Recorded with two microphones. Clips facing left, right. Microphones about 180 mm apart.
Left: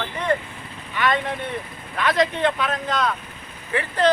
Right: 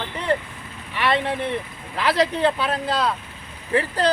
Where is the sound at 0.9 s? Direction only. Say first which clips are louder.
Right 1 dB; 30° right (ahead or behind).